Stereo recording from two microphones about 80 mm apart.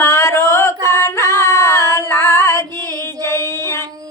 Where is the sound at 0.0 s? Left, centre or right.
Left.